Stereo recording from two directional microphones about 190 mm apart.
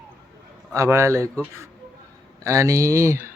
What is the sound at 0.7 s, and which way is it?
Speech, 15° right (ahead or behind).